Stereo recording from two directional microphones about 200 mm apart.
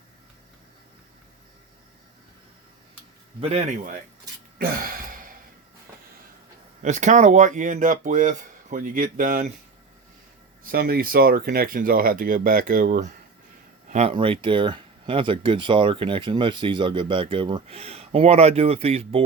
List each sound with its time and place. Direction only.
3.5 s speech: 40° right (ahead or behind)
4.5 s a sound: 45° right (ahead or behind)
6.8 s speech: 35° right (ahead or behind)
10.6 s speech: 45° right (ahead or behind)
13.9 s speech: 30° right (ahead or behind)